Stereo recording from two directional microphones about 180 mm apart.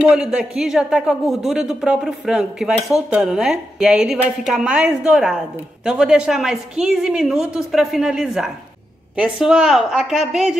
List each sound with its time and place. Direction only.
0.1 s speech: 5° right (ahead or behind)